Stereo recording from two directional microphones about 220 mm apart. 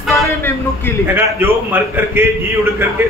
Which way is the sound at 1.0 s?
10° right (ahead or behind).